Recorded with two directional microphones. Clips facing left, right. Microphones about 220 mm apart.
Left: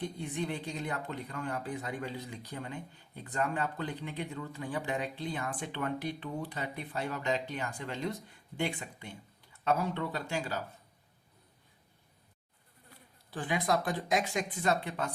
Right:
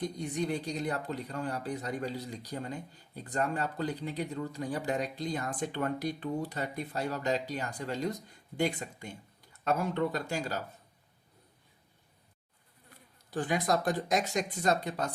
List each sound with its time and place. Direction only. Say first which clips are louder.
0.0 s speech: right 3 dB; 40° right (ahead or behind)
13.3 s speech: right 2 dB; 45° right (ahead or behind)